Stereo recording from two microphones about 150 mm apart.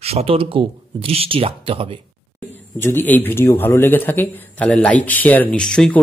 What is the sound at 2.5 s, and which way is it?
Speech, 15° left (ahead or behind).